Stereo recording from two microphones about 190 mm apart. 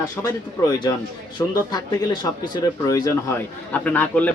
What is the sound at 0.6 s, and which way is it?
A man's voice, 20° left (ahead or behind).